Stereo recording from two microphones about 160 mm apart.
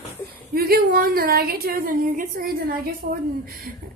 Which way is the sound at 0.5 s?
65° right (ahead or behind).